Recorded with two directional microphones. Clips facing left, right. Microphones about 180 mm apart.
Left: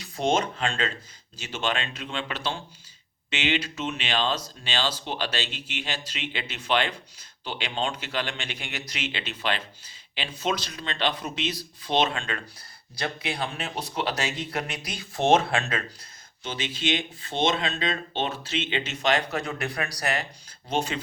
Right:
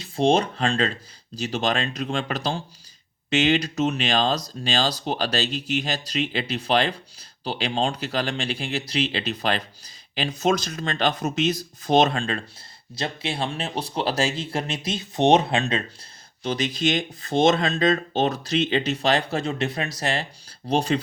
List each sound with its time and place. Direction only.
0.0 s speech: 30° right (ahead or behind)
16.4 s speech: 40° right (ahead or behind)